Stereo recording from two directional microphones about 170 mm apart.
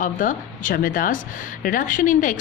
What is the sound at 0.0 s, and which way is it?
A woman's voice, 50° left (ahead or behind).